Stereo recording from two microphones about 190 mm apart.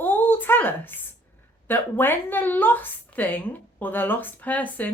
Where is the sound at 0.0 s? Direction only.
10° left (ahead or behind).